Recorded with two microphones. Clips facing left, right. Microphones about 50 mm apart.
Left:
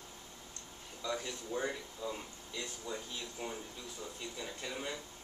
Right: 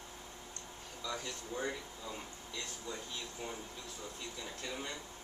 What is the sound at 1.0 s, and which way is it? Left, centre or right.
Speech, centre.